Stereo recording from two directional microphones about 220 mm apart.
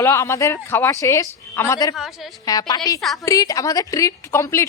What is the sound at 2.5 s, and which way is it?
A woman's voice, 15° left (ahead or behind).